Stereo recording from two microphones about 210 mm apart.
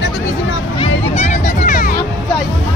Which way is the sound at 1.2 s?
35° left (ahead or behind).